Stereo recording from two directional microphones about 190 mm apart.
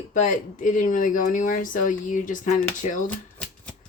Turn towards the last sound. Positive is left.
turn(degrees=5)  # may be behind; listen again after turning